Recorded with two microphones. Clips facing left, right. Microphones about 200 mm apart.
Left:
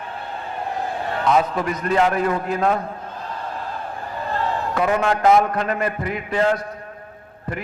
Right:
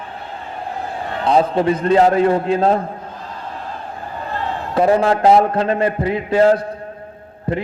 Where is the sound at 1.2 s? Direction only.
30° right (ahead or behind).